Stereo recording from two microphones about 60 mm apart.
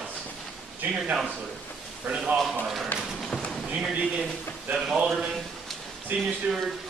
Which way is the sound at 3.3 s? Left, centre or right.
Centre.